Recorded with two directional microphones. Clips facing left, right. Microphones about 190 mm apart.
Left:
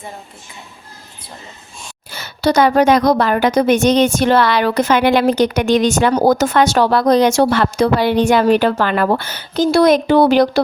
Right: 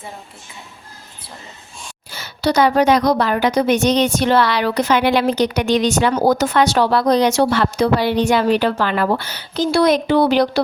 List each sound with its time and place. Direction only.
2.0 s a woman's voice: 55° left (ahead or behind)